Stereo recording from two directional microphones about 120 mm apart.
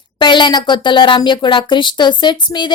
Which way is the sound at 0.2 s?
40° left (ahead or behind).